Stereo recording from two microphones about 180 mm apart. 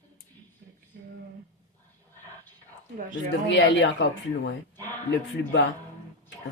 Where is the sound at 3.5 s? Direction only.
85° left.